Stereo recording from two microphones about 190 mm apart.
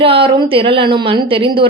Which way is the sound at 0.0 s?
30° right (ahead or behind).